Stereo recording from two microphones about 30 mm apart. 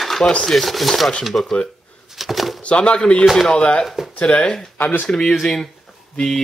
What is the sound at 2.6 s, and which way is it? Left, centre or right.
Speech, left.